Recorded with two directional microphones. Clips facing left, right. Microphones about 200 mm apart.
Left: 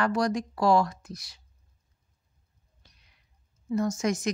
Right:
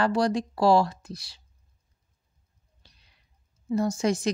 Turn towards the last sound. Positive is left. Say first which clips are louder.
# right 2 dB
turn(degrees=-30)  # may be behind; listen again after turning